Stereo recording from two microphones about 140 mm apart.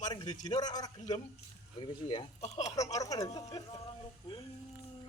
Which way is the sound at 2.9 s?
25° left (ahead or behind).